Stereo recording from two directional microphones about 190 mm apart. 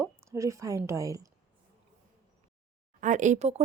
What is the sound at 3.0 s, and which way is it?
Speech, 40° right (ahead or behind).